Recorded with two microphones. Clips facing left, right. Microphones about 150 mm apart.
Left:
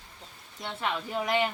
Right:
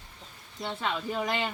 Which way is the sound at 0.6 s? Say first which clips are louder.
Right 1 dB; centre (ahead or behind).